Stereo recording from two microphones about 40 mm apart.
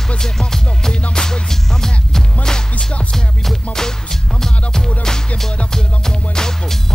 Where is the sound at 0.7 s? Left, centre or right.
Left.